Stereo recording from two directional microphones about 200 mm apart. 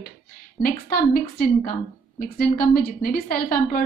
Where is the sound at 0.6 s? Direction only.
45° left (ahead or behind).